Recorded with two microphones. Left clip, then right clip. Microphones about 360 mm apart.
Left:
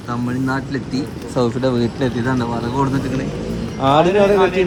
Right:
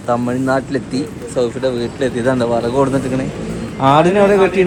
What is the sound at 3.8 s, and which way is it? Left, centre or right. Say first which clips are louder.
Speech: right 3 dB; centre.